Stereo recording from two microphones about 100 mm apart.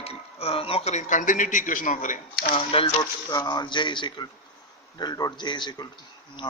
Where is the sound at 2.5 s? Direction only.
65° left (ahead or behind).